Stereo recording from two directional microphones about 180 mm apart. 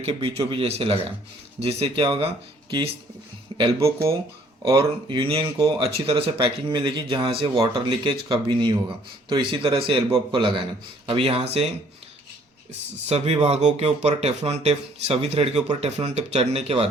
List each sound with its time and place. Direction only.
0.0 s speech: 30° right (ahead or behind)
3.8 s speech: 15° right (ahead or behind)
4.6 s speech: 30° right (ahead or behind)
13.1 s speech: 35° right (ahead or behind)